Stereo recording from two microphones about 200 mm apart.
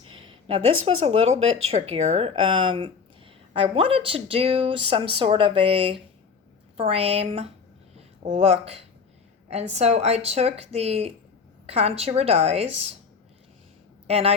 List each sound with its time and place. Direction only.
0.2 s speech: 25° right (ahead or behind)
14.1 s speech: 30° right (ahead or behind)